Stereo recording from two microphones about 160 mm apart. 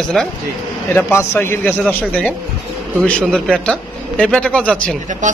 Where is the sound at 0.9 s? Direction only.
15° left (ahead or behind).